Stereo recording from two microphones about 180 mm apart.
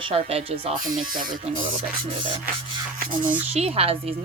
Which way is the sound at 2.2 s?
25° right (ahead or behind).